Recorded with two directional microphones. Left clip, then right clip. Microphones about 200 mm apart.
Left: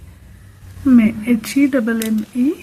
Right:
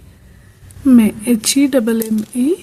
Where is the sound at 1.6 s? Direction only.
40° right (ahead or behind).